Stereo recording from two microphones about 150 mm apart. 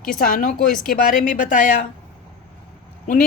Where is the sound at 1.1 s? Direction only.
60° left (ahead or behind).